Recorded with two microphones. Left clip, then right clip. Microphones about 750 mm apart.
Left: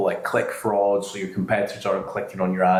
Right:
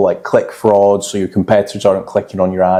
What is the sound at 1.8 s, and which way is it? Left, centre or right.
Speech, right.